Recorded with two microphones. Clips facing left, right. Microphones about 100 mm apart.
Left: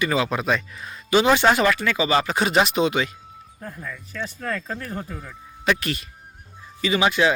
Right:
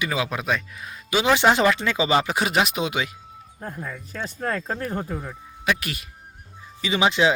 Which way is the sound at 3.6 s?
30° right (ahead or behind).